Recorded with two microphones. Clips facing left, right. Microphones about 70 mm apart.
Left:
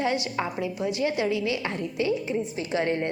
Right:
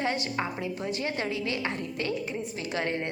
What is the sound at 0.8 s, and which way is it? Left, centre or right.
Speech, right.